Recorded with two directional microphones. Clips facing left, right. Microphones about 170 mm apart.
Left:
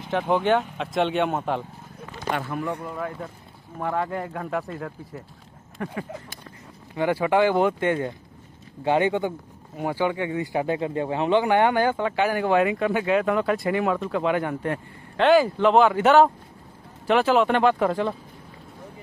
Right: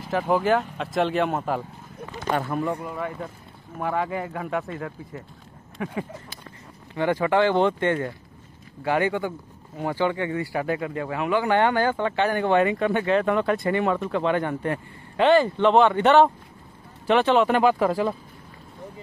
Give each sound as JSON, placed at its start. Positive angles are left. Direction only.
{"t": 0.0, "sound": "speech", "side_deg": 0}
{"t": 2.3, "sound": "speech", "side_deg": -40}
{"t": 2.8, "sound": "speech", "side_deg": -5}
{"t": 7.0, "sound": "speech", "side_deg": 10}
{"t": 11.4, "sound": "speech", "side_deg": 15}